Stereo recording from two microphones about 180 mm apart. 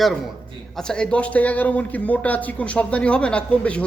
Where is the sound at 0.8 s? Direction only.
5° left (ahead or behind).